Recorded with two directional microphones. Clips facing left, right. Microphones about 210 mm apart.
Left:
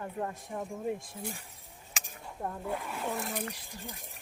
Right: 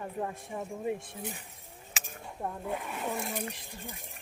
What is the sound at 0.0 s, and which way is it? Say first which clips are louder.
Speech: right 1 dB; 10° right (ahead or behind).